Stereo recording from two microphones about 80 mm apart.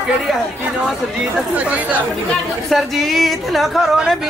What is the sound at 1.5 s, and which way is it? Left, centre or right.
Speech, centre.